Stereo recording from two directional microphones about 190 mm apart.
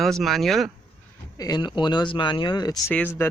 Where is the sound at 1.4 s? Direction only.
20° left (ahead or behind).